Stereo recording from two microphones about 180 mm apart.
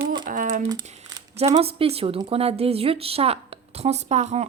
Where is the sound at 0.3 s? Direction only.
45° right (ahead or behind).